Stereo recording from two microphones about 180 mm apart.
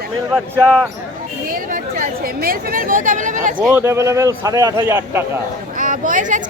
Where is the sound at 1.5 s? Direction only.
50° right (ahead or behind).